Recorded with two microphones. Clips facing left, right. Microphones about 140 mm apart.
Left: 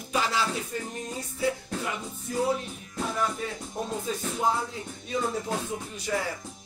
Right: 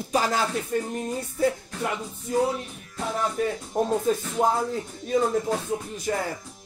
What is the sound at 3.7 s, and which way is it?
Music, 50° right (ahead or behind).